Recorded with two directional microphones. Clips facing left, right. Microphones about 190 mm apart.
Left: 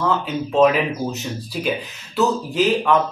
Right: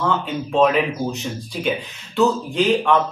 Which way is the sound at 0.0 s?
Centre (ahead or behind).